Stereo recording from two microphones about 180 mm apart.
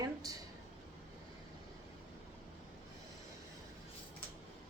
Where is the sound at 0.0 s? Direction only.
20° right (ahead or behind).